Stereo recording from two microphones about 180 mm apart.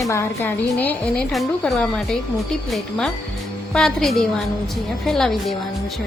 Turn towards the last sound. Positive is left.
turn(degrees=0)  # may be behind; listen again after turning